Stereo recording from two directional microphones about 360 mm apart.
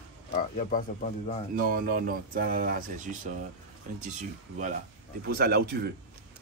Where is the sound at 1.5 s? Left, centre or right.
Right.